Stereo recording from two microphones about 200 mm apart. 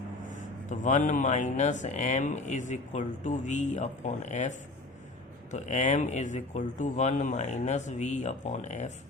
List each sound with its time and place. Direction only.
0.7 s speech: 40° left (ahead or behind)